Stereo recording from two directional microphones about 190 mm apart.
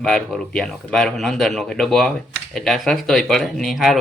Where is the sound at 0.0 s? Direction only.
Centre (ahead or behind).